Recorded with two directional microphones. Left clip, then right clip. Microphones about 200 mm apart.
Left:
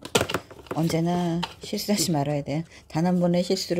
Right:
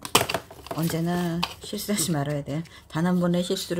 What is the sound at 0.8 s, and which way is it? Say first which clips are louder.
Speech: left 2 dB; 20° left (ahead or behind).